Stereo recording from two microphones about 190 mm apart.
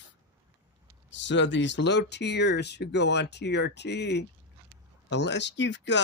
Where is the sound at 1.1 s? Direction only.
70° left (ahead or behind).